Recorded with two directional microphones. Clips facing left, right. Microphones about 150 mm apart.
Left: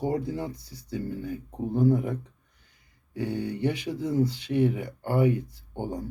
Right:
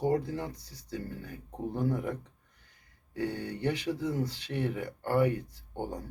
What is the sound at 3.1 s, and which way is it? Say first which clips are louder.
Speech: left 4 dB; 15° left (ahead or behind).